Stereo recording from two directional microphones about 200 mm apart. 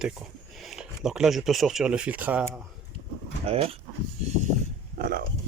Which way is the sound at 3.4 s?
30° right (ahead or behind).